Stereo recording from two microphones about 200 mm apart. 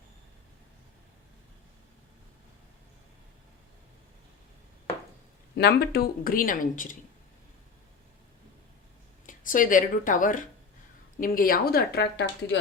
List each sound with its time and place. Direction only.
5.5 s speech: 55° left (ahead or behind)
9.2 s a woman's voice: 40° left (ahead or behind)